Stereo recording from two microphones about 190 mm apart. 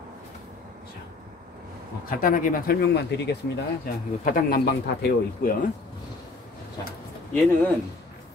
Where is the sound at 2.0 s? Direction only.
50° left (ahead or behind).